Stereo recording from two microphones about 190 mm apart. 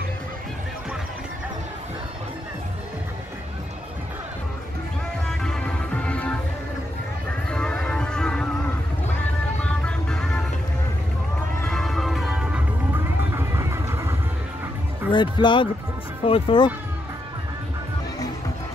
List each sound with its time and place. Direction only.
5.4 s music: 5° left (ahead or behind)
7.5 s music: 5° left (ahead or behind)
9.6 s music: 5° left (ahead or behind)
11.6 s music: centre (ahead or behind)
13.6 s vehicle: 15° right (ahead or behind)
15.0 s speech: 25° left (ahead or behind)